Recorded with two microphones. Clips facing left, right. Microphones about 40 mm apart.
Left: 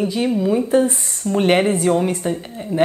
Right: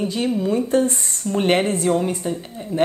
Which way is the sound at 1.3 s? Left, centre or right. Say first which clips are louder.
Left 3 dB; centre.